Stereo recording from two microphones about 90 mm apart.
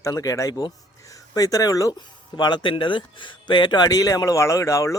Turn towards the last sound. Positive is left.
turn(degrees=35)  # may be behind; listen again after turning